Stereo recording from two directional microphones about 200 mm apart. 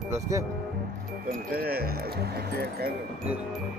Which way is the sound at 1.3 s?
50° right (ahead or behind).